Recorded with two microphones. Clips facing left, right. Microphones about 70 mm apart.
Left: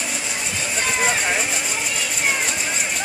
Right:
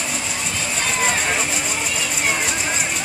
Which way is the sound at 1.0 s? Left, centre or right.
Centre.